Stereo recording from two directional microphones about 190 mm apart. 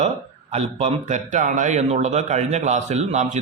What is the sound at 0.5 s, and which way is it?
A man's voice, 35° right (ahead or behind).